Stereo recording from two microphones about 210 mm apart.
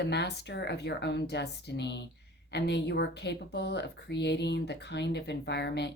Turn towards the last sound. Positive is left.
turn(degrees=50)  # may be behind; listen again after turning